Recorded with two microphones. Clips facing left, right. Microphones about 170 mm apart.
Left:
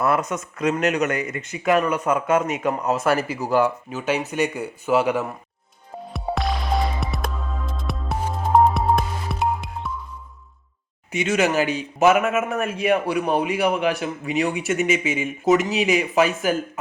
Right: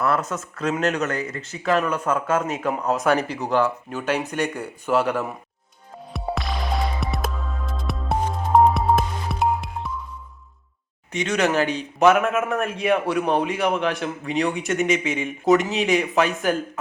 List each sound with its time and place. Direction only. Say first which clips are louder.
0.0 s a man's voice: left 1 dB; 20° left (ahead or behind)
6.1 s music: left 2 dB; centre (ahead or behind)
11.1 s a man's voice: left 1 dB; 5° left (ahead or behind)